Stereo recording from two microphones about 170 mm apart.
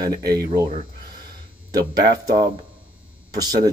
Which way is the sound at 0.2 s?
70° right (ahead or behind).